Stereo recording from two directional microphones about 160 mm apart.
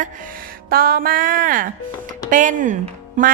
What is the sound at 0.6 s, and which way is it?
Music, 70° right (ahead or behind).